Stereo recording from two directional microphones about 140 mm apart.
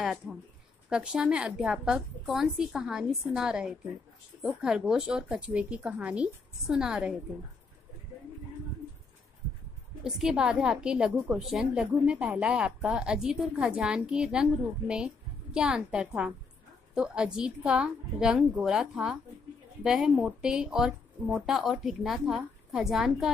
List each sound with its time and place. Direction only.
0.0 s a woman's voice: 5° right (ahead or behind)
10.0 s a woman's voice: 5° right (ahead or behind)